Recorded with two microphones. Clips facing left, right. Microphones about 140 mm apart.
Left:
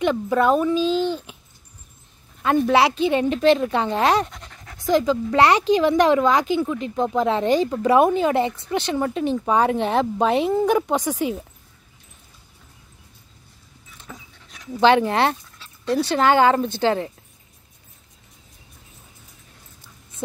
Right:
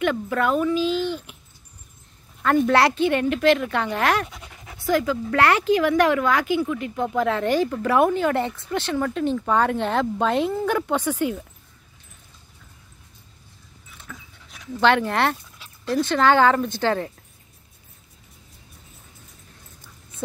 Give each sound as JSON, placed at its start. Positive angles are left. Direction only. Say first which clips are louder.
{"t": 0.0, "sound": "a woman's voice", "louder": "left 3 dB", "side_deg": 20}
{"t": 2.4, "sound": "a woman's voice", "louder": "left 1 dB", "side_deg": 15}
{"t": 4.3, "sound": "pant", "louder": "even", "side_deg": -5}
{"t": 4.8, "sound": "a woman's voice", "louder": "left 3 dB", "side_deg": 20}
{"t": 14.1, "sound": "dog", "louder": "left 2 dB", "side_deg": 20}
{"t": 14.7, "sound": "speech", "louder": "left 3 dB", "side_deg": 15}
{"t": 15.6, "sound": "dog", "louder": "even", "side_deg": -15}
{"t": 16.0, "sound": "a woman's voice", "louder": "even", "side_deg": 10}